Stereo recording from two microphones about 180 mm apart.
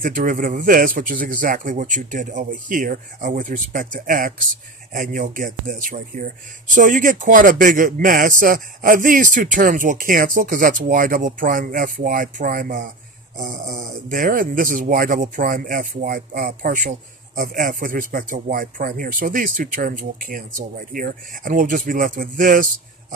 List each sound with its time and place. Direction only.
0.0 s a man's voice: 50° right (ahead or behind)